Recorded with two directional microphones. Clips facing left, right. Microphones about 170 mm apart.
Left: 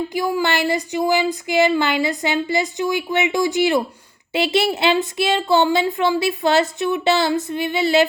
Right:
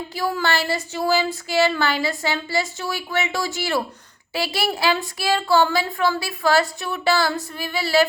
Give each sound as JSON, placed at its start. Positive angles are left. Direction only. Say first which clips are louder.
{"t": 0.1, "sound": "speech", "louder": "left 3 dB", "side_deg": 15}